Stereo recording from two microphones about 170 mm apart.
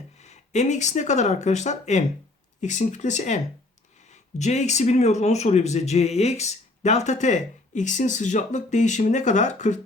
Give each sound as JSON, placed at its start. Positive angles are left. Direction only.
{"t": 0.2, "sound": "speech", "side_deg": 40}